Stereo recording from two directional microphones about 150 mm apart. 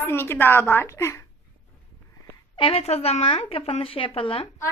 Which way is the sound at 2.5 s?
40° left (ahead or behind).